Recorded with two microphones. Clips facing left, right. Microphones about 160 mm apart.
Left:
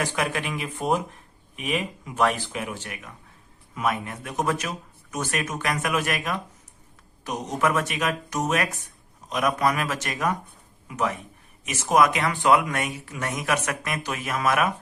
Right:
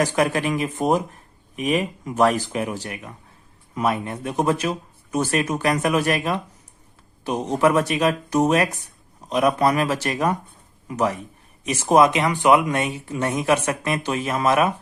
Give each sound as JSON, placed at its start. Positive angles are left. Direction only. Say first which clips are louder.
{"t": 0.0, "sound": "speech", "louder": "right 7 dB", "side_deg": -40}